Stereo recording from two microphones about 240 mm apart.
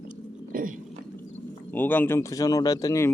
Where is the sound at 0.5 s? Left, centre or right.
Right.